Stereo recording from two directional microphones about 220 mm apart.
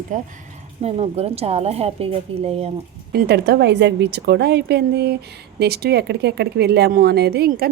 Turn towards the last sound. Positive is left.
turn(degrees=-45)  # may be behind; listen again after turning